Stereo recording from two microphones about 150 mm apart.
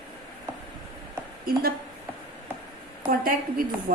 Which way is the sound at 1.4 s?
90° right.